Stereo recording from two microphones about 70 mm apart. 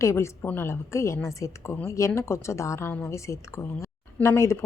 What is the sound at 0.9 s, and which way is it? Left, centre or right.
A woman's voice, left.